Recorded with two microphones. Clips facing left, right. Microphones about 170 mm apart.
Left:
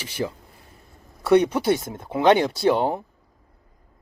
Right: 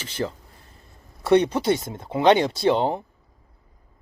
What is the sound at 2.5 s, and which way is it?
Speech, 20° right (ahead or behind).